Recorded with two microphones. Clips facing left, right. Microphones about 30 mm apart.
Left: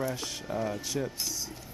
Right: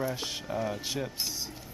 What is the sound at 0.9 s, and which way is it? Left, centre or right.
Speech, right.